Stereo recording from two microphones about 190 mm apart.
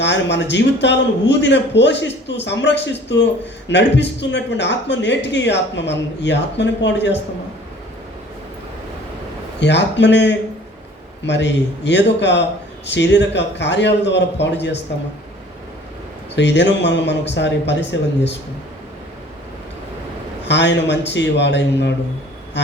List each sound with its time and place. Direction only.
0.0 s speech: 65° left (ahead or behind)
9.6 s speech: 65° left (ahead or behind)
16.3 s speech: 65° left (ahead or behind)
20.5 s speech: 65° left (ahead or behind)